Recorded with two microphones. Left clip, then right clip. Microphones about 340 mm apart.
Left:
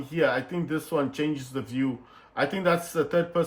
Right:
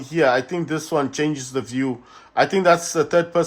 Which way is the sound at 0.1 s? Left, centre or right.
Right.